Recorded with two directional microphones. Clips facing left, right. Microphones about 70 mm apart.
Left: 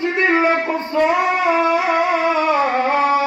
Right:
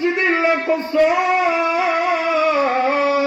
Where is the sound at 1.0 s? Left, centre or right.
Left.